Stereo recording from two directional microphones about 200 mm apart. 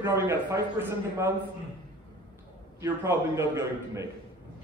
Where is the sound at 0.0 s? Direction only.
15° right (ahead or behind).